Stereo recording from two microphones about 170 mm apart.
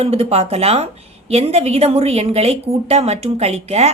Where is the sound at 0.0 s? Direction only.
35° right (ahead or behind).